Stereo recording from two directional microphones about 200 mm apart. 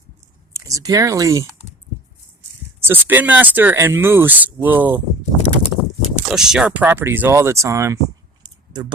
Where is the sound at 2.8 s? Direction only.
10° right (ahead or behind).